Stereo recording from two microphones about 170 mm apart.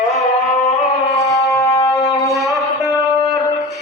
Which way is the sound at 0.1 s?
Centre (ahead or behind).